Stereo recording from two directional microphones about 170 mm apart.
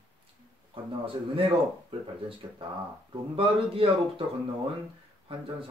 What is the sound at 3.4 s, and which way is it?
Speech, 30° right (ahead or behind).